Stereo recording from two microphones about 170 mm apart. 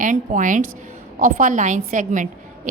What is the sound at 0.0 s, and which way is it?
A woman's voice, 50° right (ahead or behind).